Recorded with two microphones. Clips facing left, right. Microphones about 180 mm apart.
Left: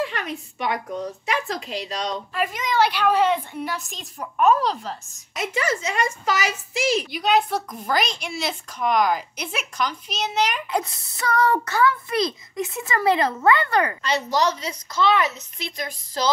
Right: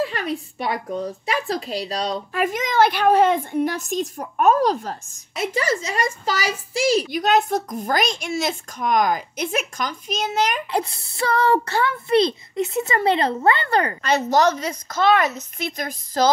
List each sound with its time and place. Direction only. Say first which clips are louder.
0.0 s speech: right 3 dB; 35° right (ahead or behind)
2.3 s a child's voice: right 3 dB; 45° right (ahead or behind)
5.4 s a child's voice: right 2 dB; 30° right (ahead or behind)
10.7 s a child's voice: right 2 dB; 30° right (ahead or behind)
14.0 s a child's voice: right 4 dB; 50° right (ahead or behind)